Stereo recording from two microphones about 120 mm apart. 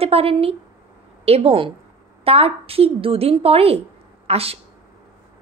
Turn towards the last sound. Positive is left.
turn(degrees=-55)  # may be behind; listen again after turning